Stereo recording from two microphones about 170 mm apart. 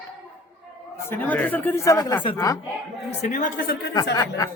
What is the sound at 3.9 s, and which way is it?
Speech, 20° left (ahead or behind).